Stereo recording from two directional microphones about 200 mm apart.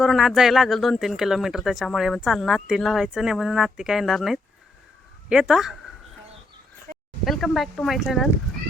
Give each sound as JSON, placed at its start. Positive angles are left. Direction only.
{"t": 0.0, "sound": "speech", "side_deg": 0}
{"t": 6.9, "sound": "a sound", "side_deg": -50}
{"t": 7.3, "sound": "speech", "side_deg": 0}